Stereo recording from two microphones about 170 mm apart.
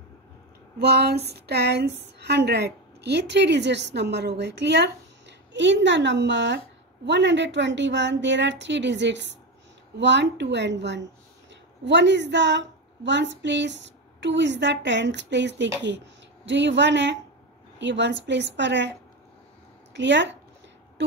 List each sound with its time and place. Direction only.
0.7 s a woman's voice: 75° right (ahead or behind); by 18.9 s 90° right
19.9 s speech: 90° right